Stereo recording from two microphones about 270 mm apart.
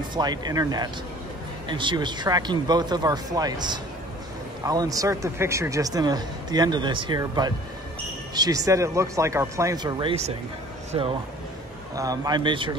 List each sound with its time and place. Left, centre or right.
0.1 s speech: centre